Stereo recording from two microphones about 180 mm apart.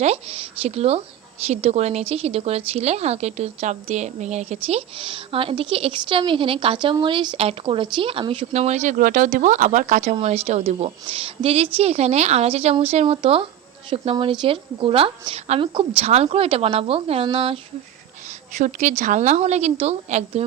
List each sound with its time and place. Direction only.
0.0 s speech: 35° right (ahead or behind)
18.5 s speech: 40° right (ahead or behind)